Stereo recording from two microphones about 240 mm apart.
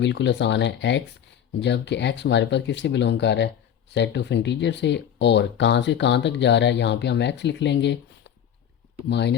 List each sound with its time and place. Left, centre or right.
0.0 s speech: left